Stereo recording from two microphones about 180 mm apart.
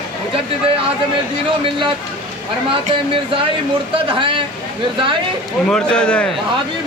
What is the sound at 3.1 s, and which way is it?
Speech, 30° right (ahead or behind).